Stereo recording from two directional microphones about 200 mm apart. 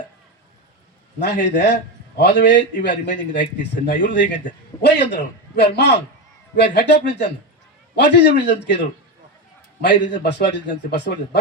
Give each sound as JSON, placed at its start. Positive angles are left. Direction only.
{"t": 1.2, "sound": "a man's voice", "side_deg": 60}